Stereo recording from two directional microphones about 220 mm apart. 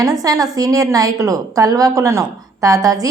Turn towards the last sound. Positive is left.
turn(degrees=-15)  # may be behind; listen again after turning